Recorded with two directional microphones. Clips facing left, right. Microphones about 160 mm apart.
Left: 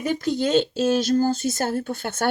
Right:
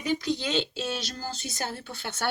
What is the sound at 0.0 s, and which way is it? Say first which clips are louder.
Speech: left 5 dB; 45° left (ahead or behind).